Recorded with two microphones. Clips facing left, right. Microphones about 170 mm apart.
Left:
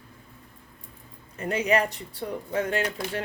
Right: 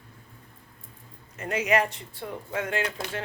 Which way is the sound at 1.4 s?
30° left (ahead or behind).